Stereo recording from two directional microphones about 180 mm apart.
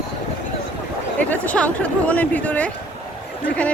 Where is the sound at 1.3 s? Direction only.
10° left (ahead or behind).